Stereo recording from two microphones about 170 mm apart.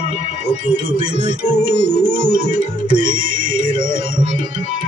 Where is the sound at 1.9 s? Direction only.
50° right (ahead or behind).